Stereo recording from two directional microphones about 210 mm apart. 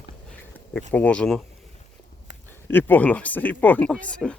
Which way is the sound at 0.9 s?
5° left (ahead or behind).